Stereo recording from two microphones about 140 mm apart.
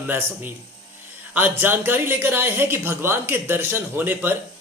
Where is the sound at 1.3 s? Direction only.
15° right (ahead or behind).